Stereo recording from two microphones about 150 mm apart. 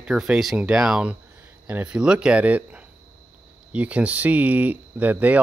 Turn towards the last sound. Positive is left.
turn(degrees=-10)  # may be behind; listen again after turning